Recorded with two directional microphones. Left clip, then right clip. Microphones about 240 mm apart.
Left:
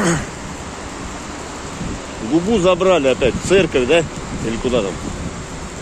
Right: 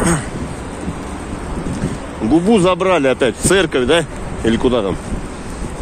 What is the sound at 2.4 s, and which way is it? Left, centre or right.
Speech, right.